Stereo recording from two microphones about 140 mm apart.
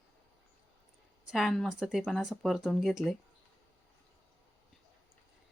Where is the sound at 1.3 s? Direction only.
Centre (ahead or behind).